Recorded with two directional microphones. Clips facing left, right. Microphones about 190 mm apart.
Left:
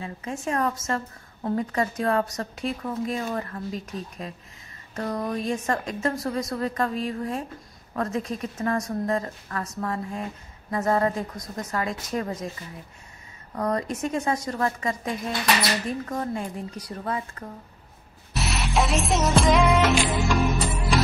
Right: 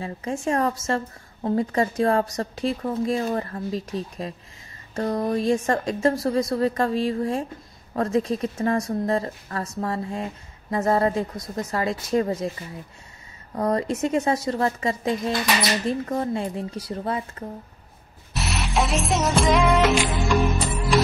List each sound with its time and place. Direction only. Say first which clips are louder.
0.0 s a woman's voice: right 4 dB; 30° right (ahead or behind)
13.6 s speech: right 3 dB; 30° right (ahead or behind)
18.3 s music: even; centre (ahead or behind)